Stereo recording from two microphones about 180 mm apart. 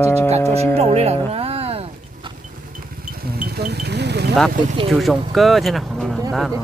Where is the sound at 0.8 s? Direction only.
35° right (ahead or behind).